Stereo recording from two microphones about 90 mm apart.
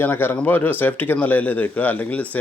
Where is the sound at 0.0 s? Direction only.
25° left (ahead or behind).